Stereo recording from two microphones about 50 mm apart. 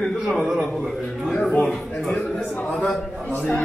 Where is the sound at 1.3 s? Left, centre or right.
Left.